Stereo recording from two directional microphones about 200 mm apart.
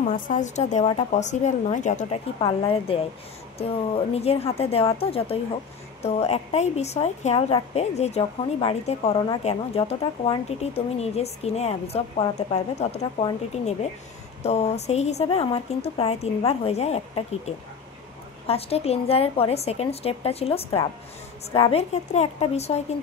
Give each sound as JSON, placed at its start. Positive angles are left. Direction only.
{"t": 0.0, "sound": "speech", "side_deg": 40}
{"t": 2.4, "sound": "a woman's voice", "side_deg": 25}